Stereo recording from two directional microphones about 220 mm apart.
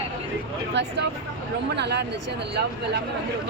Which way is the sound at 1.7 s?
50° right (ahead or behind).